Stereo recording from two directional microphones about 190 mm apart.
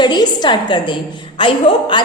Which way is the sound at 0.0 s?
25° left (ahead or behind).